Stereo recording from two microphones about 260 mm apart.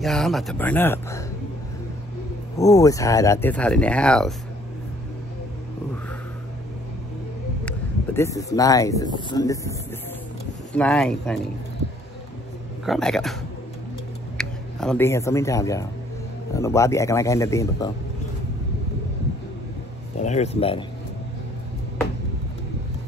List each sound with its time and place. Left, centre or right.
0.0 s speech: centre
2.5 s speech: centre
7.6 s speech: centre
12.8 s speech: centre
14.4 s speech: centre
20.2 s speech: left